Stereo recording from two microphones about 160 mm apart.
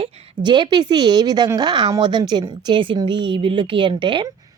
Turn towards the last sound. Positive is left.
turn(degrees=-30)  # may be behind; listen again after turning